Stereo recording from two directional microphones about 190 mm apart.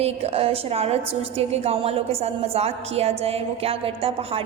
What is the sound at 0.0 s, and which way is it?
A woman's voice, 30° right (ahead or behind).